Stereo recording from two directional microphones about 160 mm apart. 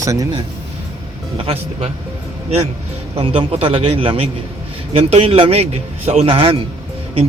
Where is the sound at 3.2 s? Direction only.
35° right (ahead or behind).